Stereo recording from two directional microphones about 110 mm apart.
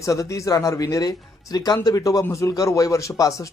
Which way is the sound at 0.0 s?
30° left (ahead or behind).